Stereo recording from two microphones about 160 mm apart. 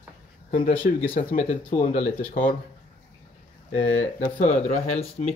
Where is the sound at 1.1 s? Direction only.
55° left (ahead or behind).